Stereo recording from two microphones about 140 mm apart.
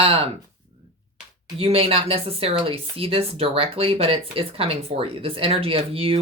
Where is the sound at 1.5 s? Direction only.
45° right (ahead or behind).